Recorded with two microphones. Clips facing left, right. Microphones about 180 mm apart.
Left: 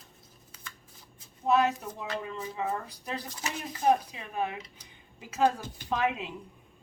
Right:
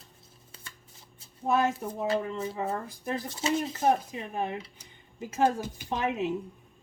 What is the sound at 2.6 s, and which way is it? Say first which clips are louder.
Speech: right 1 dB; 50° right (ahead or behind).